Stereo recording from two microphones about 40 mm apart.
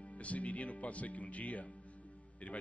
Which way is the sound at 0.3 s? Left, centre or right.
Left.